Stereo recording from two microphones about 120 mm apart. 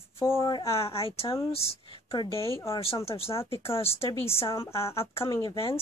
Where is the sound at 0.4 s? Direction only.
40° left (ahead or behind).